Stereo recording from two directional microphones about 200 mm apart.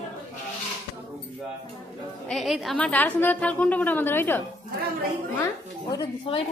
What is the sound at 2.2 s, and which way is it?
A woman's voice, centre (ahead or behind).